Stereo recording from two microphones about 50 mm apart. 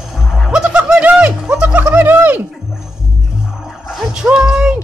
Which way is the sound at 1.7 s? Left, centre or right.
Right.